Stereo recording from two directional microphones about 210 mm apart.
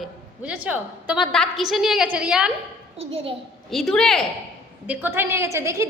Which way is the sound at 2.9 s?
30° right (ahead or behind).